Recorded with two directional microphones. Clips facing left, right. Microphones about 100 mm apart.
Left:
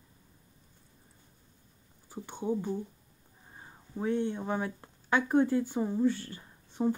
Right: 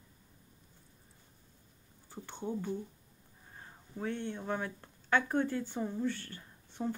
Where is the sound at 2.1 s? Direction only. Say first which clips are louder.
Left 6 dB; 15° left (ahead or behind).